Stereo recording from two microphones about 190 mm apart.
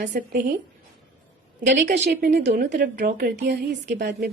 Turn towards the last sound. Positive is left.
turn(degrees=-60)  # may be behind; listen again after turning